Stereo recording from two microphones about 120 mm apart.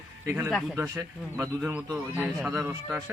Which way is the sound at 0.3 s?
15° right (ahead or behind).